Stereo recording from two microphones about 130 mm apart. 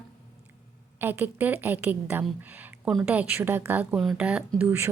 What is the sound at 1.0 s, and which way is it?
A woman's voice, 15° right (ahead or behind).